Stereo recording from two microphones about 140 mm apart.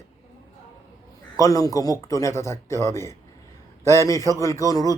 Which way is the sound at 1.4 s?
25° left (ahead or behind).